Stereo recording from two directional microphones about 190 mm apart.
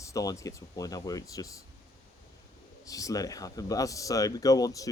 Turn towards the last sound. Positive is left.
turn(degrees=20)  # may be behind; listen again after turning